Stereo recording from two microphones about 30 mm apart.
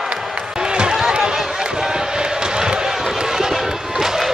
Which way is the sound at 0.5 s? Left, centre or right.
Right.